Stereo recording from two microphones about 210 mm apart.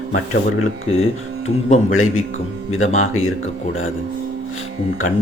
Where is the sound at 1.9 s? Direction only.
75° left (ahead or behind).